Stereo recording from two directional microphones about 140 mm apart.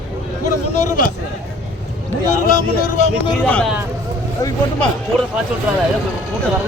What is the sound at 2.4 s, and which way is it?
Speech, 80° left.